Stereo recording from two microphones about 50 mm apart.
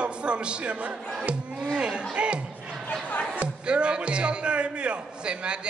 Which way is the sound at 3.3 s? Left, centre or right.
Right.